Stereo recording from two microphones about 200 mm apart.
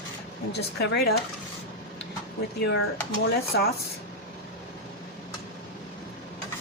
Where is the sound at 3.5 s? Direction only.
60° left (ahead or behind).